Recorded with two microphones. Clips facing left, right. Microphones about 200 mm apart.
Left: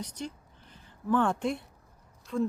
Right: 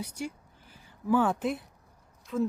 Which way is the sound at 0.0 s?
10° right (ahead or behind).